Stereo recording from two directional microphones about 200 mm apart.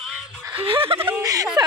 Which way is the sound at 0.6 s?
25° right (ahead or behind).